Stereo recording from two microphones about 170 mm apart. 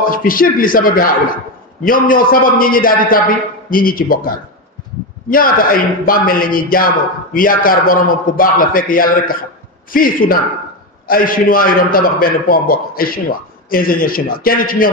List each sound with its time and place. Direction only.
0.0 s a man's voice: 55° left (ahead or behind)